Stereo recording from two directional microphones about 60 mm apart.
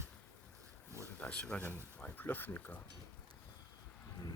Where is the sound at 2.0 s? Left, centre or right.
Left.